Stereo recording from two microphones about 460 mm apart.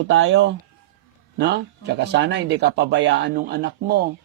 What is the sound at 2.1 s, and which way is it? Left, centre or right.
Speech, right.